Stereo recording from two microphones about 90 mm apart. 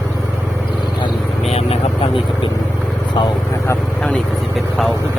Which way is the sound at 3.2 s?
60° left (ahead or behind).